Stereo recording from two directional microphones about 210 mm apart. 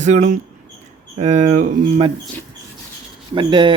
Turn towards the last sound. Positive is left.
turn(degrees=-20)  # may be behind; listen again after turning